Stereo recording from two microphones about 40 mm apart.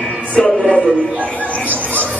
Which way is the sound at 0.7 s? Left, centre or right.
Left.